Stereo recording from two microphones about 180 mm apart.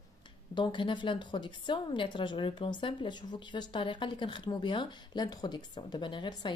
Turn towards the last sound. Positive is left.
turn(degrees=25)  # may be behind; listen again after turning